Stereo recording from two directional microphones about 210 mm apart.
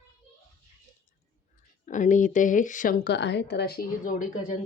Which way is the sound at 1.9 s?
35° left (ahead or behind).